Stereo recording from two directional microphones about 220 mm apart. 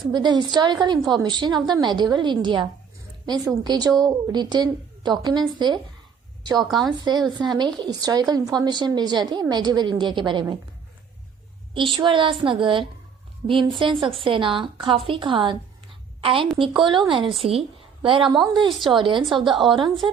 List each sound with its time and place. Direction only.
0.1 s a woman's voice: 20° right (ahead or behind)
6.7 s a woman's voice: centre (ahead or behind)
7.3 s speech: 20° right (ahead or behind)
11.7 s a woman's voice: 25° right (ahead or behind)